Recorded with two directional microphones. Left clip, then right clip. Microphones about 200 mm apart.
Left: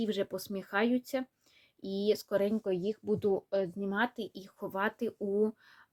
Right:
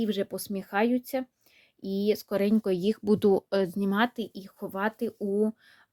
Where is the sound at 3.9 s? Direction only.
35° right (ahead or behind).